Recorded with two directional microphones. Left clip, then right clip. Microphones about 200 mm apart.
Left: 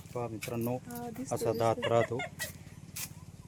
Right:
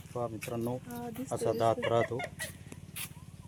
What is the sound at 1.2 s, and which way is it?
Speech, 25° left (ahead or behind).